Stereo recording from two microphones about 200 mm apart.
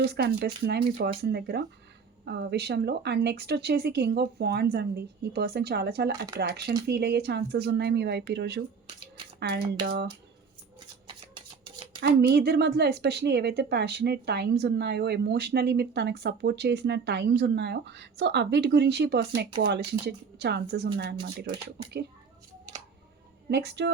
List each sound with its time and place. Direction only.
0.0 s a woman's voice: 55° right (ahead or behind)
9.8 s speech: 50° right (ahead or behind)
11.0 s a sound: 25° right (ahead or behind)
11.9 s a woman's voice: 50° right (ahead or behind)
23.5 s a woman's voice: 55° right (ahead or behind)